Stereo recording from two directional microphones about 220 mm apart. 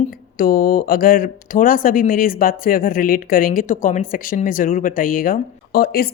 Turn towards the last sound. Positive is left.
turn(degrees=45)  # may be behind; listen again after turning